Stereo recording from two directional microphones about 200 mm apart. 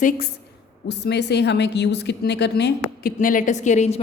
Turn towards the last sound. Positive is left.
turn(degrees=35)  # may be behind; listen again after turning